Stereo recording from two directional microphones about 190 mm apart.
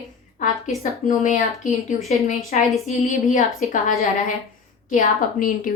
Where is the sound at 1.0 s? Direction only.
40° left (ahead or behind).